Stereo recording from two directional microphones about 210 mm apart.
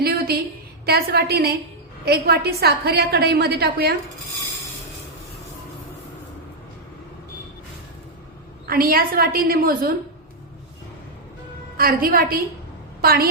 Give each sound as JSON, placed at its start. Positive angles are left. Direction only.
{"t": 0.0, "sound": "a sound", "side_deg": -45}
{"t": 0.9, "sound": "a woman's voice", "side_deg": -50}
{"t": 8.6, "sound": "a woman's voice", "side_deg": -45}
{"t": 11.8, "sound": "a woman's voice", "side_deg": -45}